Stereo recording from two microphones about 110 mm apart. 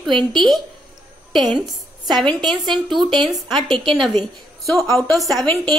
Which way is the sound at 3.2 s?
Centre (ahead or behind).